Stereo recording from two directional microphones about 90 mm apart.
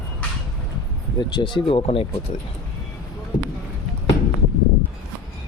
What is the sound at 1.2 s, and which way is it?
Speech, 55° left (ahead or behind).